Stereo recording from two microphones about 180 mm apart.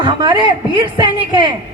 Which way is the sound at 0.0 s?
25° right (ahead or behind).